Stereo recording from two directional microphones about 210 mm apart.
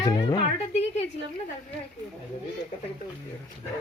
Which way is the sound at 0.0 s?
15° left (ahead or behind).